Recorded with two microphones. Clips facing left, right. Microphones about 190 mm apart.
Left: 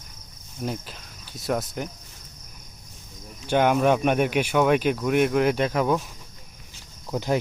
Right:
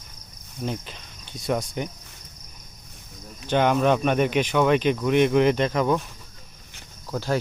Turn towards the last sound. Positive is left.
turn(degrees=20)  # may be behind; listen again after turning